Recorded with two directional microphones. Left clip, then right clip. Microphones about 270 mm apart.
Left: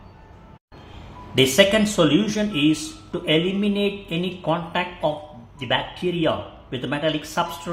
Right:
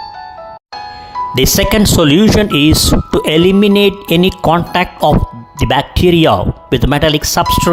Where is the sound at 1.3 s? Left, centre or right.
Right.